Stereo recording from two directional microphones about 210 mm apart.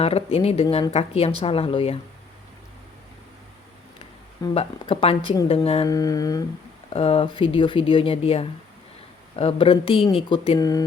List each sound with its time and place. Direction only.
0.0 s speech: 30° left (ahead or behind)
4.4 s speech: 25° left (ahead or behind)
5.9 s humming: 15° left (ahead or behind)
6.9 s speech: 30° left (ahead or behind)